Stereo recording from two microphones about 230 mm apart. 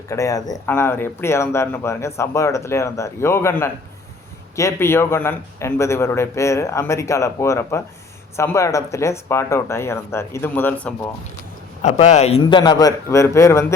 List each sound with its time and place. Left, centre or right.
0.1 s speech: centre
11.8 s a man's voice: left; by 13.7 s centre